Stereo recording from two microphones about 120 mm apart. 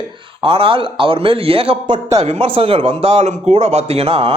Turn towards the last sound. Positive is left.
turn(degrees=-55)  # may be behind; listen again after turning